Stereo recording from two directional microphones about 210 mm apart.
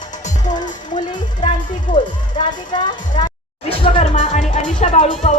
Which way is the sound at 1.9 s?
20° left (ahead or behind).